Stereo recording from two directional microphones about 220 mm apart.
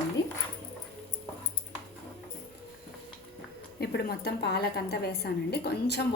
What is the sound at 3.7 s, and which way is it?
A woman's voice, 45° left (ahead or behind).